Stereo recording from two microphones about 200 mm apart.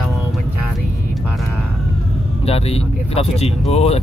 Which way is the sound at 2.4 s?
30° left (ahead or behind).